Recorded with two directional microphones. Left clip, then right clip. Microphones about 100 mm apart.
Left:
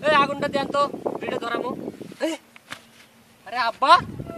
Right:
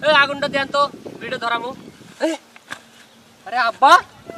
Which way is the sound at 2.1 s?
25° left (ahead or behind).